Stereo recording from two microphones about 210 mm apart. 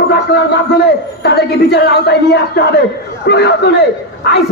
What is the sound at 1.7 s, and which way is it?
A man's voice, 50° left (ahead or behind).